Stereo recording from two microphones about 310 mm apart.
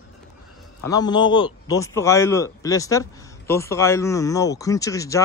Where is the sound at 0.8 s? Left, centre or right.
Centre.